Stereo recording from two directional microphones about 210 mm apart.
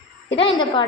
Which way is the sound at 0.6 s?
20° left (ahead or behind).